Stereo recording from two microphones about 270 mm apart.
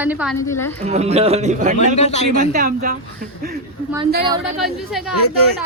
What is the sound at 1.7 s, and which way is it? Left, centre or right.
Speech, left.